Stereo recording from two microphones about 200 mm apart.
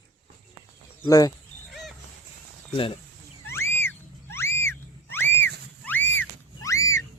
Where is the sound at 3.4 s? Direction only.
10° left (ahead or behind).